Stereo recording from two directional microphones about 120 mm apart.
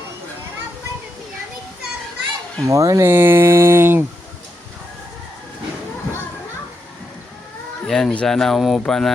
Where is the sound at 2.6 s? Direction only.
25° right (ahead or behind).